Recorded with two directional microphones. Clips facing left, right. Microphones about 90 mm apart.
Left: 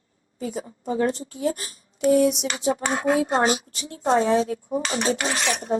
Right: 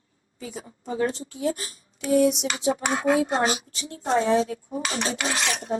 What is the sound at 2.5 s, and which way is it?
A woman's voice, 35° left (ahead or behind).